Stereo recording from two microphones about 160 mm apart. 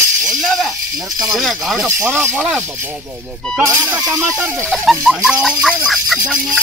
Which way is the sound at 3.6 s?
20° right (ahead or behind).